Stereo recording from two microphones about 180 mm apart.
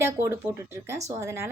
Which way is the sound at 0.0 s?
15° right (ahead or behind).